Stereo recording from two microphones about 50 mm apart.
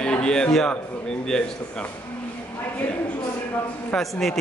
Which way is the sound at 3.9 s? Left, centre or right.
Centre.